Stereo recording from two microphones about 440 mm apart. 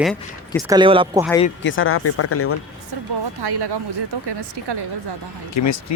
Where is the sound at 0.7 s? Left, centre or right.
Centre.